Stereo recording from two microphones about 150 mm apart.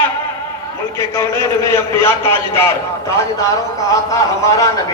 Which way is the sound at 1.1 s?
20° left (ahead or behind).